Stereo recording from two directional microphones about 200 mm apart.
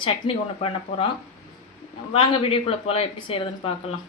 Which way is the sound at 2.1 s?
30° left (ahead or behind).